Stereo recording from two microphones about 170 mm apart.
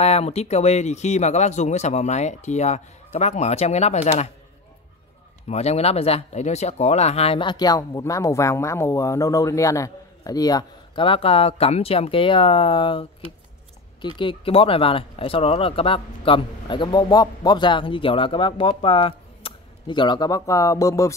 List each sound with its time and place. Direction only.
0.0 s speech: 40° left (ahead or behind)
5.5 s speech: 40° left (ahead or behind); by 11.1 s 20° left (ahead or behind)
11.1 s speech: 35° left (ahead or behind)
14.0 s speech: 30° left (ahead or behind)